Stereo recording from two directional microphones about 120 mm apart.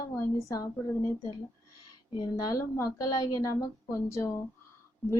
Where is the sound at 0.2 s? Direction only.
30° left (ahead or behind).